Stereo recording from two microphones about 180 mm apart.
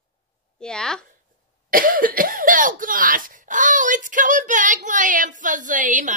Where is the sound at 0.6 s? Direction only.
5° left (ahead or behind).